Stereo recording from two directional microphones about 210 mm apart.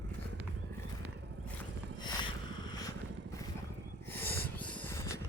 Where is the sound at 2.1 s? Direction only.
20° left (ahead or behind).